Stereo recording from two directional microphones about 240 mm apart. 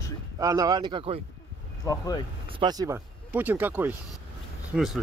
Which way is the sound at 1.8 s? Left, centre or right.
Centre.